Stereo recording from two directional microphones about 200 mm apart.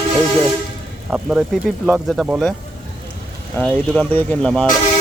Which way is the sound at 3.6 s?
5° left (ahead or behind).